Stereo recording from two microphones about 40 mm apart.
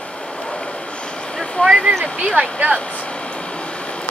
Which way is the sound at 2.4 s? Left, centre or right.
Right.